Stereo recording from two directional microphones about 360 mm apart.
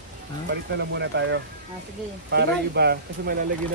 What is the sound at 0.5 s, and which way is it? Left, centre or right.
Speech, right.